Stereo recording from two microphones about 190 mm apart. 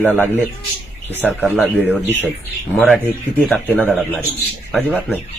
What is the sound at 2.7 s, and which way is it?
Speech, 5° left (ahead or behind).